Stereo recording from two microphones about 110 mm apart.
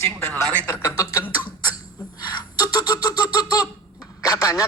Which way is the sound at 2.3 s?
40° left (ahead or behind).